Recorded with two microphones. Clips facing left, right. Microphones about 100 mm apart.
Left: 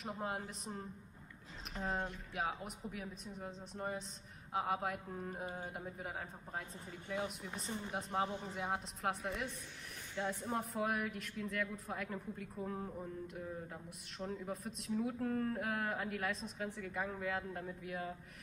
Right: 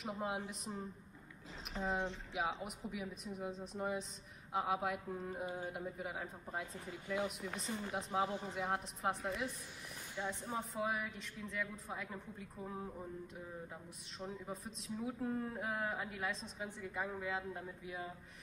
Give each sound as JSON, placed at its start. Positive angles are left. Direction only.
{"t": 0.0, "sound": "a woman's voice", "side_deg": 0}
{"t": 14.1, "sound": "a woman's voice", "side_deg": 0}
{"t": 15.1, "sound": "a woman's voice", "side_deg": -15}